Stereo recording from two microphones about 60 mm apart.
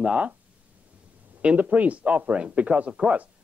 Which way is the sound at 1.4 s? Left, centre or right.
Right.